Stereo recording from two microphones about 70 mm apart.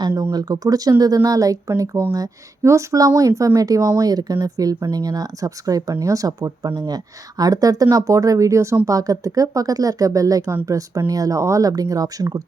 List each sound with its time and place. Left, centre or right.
0.2 s speech: right
2.6 s speech: right
6.7 s speech: right
11.7 s speech: right